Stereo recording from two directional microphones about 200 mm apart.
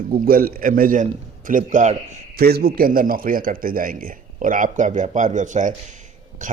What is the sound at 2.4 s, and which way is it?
Speech, 50° right (ahead or behind).